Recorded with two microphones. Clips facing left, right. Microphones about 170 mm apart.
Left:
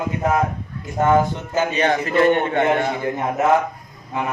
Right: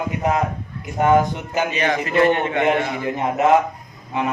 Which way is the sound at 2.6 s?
20° right (ahead or behind).